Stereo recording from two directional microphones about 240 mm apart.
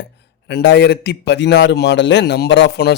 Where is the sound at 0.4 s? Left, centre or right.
Left.